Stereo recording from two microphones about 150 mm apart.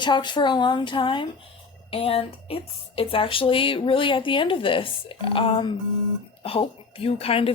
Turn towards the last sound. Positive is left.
turn(degrees=40)  # may be behind; listen again after turning